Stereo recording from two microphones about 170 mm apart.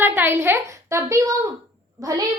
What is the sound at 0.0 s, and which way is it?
A woman's voice, 10° right (ahead or behind).